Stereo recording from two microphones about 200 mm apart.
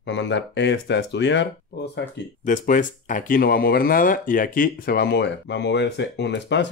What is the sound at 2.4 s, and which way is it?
Speech, 40° left (ahead or behind).